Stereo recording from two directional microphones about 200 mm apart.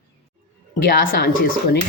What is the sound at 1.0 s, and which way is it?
Speech, 45° left (ahead or behind).